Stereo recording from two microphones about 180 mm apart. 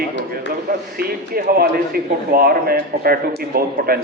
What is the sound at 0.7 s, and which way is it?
Speech, 55° right (ahead or behind).